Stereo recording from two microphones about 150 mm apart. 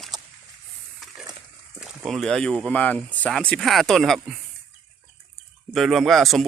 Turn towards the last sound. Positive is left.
turn(degrees=0)  # may be behind; listen again after turning